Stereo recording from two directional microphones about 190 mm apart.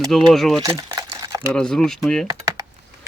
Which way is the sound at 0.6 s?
15° right (ahead or behind).